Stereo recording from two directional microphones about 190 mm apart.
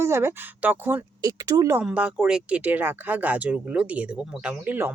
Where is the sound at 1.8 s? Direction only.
5° right (ahead or behind).